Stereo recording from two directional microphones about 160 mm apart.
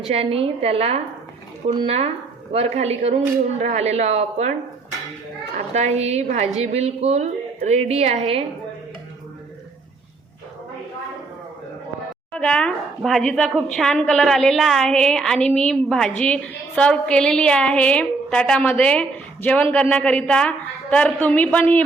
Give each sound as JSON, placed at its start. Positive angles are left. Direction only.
{"t": 0.0, "sound": "a woman's voice", "side_deg": -40}
{"t": 5.5, "sound": "a woman's voice", "side_deg": -45}
{"t": 12.3, "sound": "a woman's voice", "side_deg": 5}